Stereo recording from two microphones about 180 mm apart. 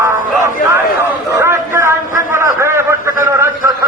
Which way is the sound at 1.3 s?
15° right (ahead or behind).